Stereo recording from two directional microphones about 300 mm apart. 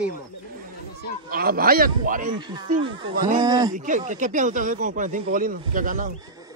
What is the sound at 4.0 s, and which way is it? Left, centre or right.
Speech, right.